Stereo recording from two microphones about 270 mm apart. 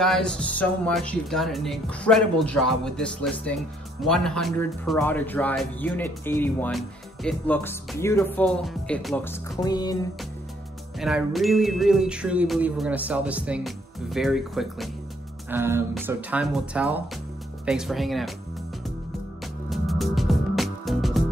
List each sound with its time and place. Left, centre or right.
0.0 s music: centre
11.0 s music: centre
19.4 s music: centre